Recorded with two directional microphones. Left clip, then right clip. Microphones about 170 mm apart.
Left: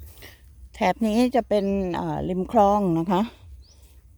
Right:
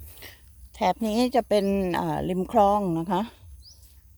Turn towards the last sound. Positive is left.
turn(degrees=30)  # may be behind; listen again after turning